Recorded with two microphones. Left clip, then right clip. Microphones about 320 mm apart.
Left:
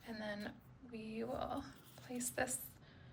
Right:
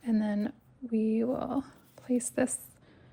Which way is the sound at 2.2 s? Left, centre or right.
Centre.